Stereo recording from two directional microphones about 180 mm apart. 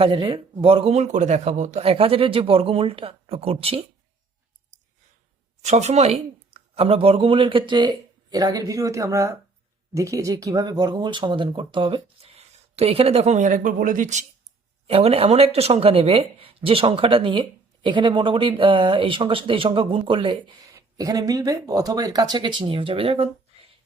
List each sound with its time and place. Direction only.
0.0 s a man's voice: 30° right (ahead or behind)
5.6 s a man's voice: 40° right (ahead or behind)